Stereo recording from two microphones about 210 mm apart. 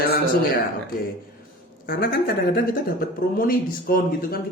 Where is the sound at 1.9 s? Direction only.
45° left (ahead or behind).